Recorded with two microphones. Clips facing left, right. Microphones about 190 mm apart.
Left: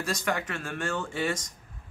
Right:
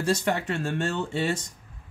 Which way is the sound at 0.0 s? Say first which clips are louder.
Right 5 dB; 30° right (ahead or behind).